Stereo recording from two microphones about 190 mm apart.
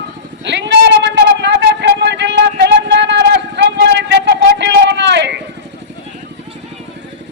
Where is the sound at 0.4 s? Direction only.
65° right (ahead or behind).